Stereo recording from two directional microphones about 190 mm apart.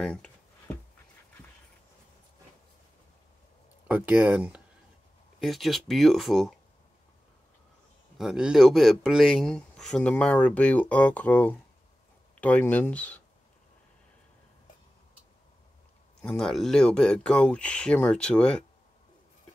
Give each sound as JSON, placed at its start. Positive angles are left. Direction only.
{"t": 0.0, "sound": "speech", "side_deg": 5}
{"t": 3.8, "sound": "speech", "side_deg": -10}
{"t": 8.2, "sound": "speech", "side_deg": -5}
{"t": 16.2, "sound": "speech", "side_deg": 5}